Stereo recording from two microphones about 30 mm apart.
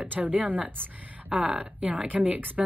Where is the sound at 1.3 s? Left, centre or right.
Right.